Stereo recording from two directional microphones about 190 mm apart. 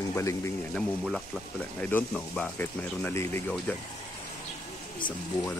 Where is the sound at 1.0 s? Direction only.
Centre (ahead or behind).